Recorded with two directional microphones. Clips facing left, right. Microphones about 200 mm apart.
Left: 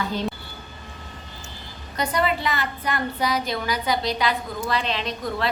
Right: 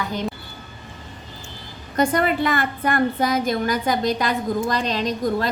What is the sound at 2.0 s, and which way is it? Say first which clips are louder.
A woman's voice: right 5 dB; 50° right (ahead or behind).